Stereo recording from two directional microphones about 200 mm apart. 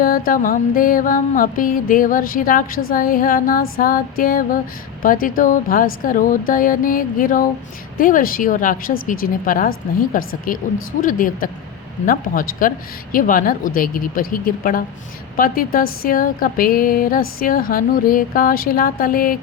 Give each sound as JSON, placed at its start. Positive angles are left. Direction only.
{"t": 0.3, "sound": "speech", "side_deg": 45}